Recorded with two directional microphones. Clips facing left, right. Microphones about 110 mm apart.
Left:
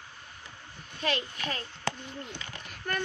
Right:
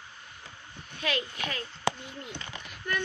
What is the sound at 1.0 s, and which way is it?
Speech, 35° left (ahead or behind).